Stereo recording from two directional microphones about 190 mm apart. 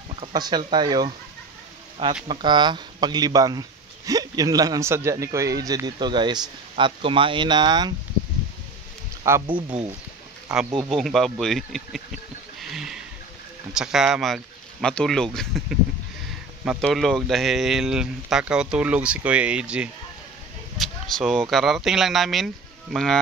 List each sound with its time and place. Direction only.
0.1 s speech: 25° right (ahead or behind)
2.2 s speech: 25° right (ahead or behind)
9.3 s speech: 15° right (ahead or behind)
10.8 s speech: centre (ahead or behind)
12.5 s a sound: centre (ahead or behind)
13.7 s speech: centre (ahead or behind)
16.6 s speech: centre (ahead or behind)